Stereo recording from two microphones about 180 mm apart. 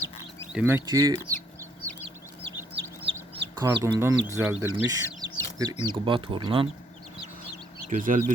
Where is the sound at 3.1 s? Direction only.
30° right (ahead or behind).